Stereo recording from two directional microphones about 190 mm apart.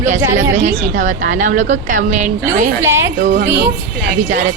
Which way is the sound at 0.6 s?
45° right (ahead or behind).